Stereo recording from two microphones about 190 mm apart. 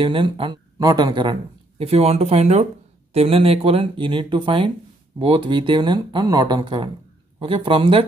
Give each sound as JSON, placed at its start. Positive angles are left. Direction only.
{"t": 0.0, "sound": "speech", "side_deg": -25}